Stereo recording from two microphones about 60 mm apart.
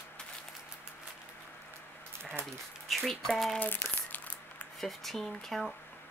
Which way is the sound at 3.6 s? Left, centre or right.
Left.